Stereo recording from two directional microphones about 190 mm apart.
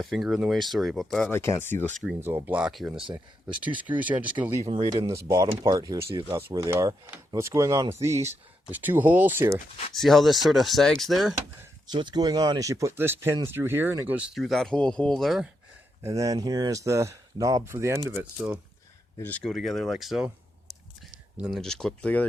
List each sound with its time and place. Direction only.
0.0 s speech: centre (ahead or behind)
1.3 s speech: 10° left (ahead or behind)
2.2 s speech: 10° right (ahead or behind)
4.6 s speech: 25° right (ahead or behind)
9.9 s speech: centre (ahead or behind)
11.9 s speech: 25° right (ahead or behind); by 15.4 s centre (ahead or behind)
16.0 s speech: 15° right (ahead or behind)
19.2 s speech: 5° left (ahead or behind)
21.3 s speech: centre (ahead or behind)